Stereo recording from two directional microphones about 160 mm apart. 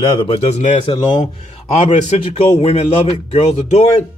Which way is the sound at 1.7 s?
45° left (ahead or behind).